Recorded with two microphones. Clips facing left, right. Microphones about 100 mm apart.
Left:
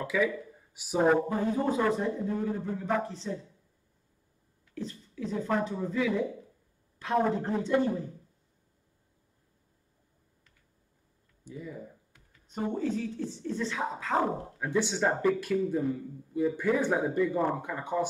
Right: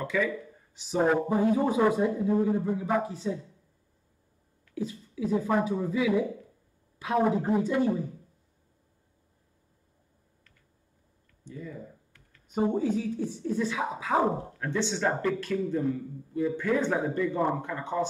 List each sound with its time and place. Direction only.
0.0 s speech: 5° left (ahead or behind)
1.3 s speech: 15° right (ahead or behind)
4.7 s speech: 10° right (ahead or behind)
11.4 s typing: 15° left (ahead or behind)
12.5 s speech: 15° right (ahead or behind)
14.6 s a man's voice: 10° left (ahead or behind)